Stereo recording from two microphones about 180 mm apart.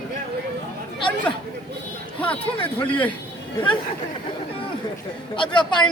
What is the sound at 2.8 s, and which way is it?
Speech, 10° left (ahead or behind).